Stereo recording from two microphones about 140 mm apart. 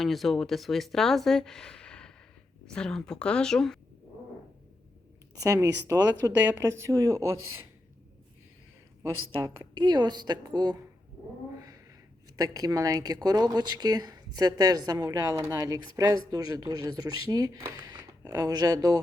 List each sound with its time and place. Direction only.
0.0 s speech: centre (ahead or behind)
5.3 s a woman's voice: 25° right (ahead or behind)
9.6 s a woman's voice: 35° right (ahead or behind)
12.4 s a woman's voice: 25° right (ahead or behind)